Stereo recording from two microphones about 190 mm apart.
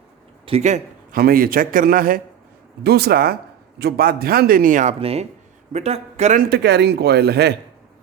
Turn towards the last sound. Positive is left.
turn(degrees=-60)  # may be behind; listen again after turning